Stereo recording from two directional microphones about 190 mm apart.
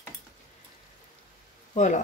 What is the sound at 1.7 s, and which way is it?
Speech, 40° left (ahead or behind).